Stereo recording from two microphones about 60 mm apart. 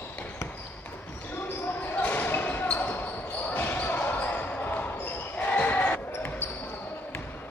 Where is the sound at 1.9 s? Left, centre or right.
Left.